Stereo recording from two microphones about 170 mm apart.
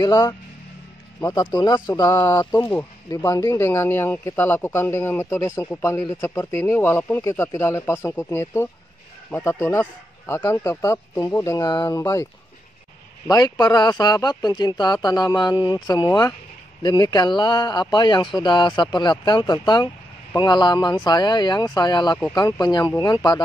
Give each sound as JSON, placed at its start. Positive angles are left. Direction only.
{"t": 0.0, "sound": "speech", "side_deg": 20}
{"t": 13.3, "sound": "speech", "side_deg": 20}